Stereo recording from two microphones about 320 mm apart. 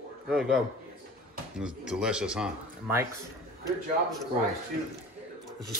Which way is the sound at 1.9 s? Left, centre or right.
Centre.